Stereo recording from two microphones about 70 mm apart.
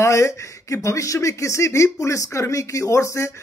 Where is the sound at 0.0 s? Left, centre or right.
Left.